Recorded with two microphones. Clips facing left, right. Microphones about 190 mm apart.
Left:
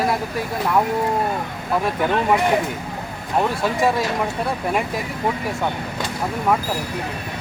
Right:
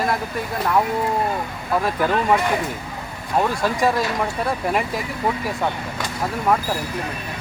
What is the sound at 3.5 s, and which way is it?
Speech, centre (ahead or behind).